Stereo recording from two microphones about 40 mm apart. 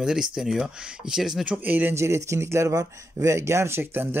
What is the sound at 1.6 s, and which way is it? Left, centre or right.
Speech, right.